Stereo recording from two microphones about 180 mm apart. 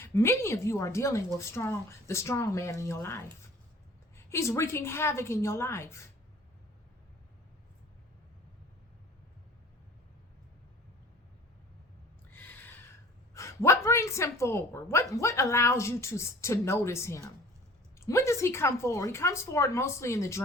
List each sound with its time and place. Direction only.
0.0 s a woman's voice: 15° left (ahead or behind)
4.3 s a woman's voice: 15° left (ahead or behind)
12.3 s a sound: 10° left (ahead or behind)
13.3 s a woman's voice: 15° left (ahead or behind)